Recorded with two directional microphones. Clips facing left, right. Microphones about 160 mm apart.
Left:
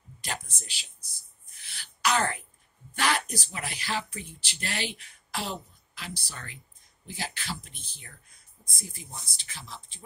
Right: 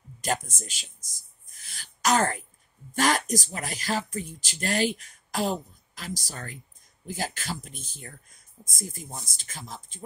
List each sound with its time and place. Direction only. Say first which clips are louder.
0.2 s speech: right 9 dB; 45° right (ahead or behind)